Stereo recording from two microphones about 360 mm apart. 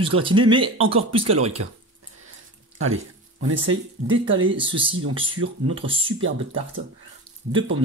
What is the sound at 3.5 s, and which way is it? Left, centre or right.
Speech, right.